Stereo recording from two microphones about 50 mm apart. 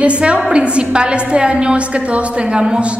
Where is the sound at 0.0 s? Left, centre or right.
Right.